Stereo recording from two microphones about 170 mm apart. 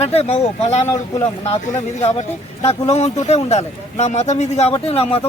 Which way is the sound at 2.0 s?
35° left (ahead or behind).